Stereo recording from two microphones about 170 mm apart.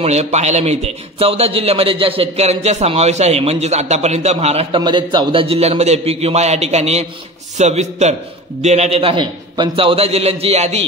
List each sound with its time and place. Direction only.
0.0 s a man's voice: 40° right (ahead or behind)